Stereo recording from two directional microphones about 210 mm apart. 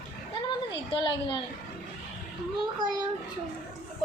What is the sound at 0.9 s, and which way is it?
Speech, 25° left (ahead or behind).